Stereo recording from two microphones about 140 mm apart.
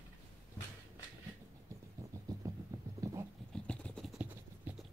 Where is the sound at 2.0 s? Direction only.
20° right (ahead or behind).